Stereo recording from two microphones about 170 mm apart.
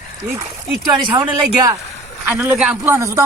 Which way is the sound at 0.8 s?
25° right (ahead or behind).